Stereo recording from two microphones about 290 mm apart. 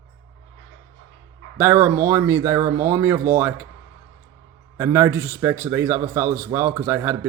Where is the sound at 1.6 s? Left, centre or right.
Centre.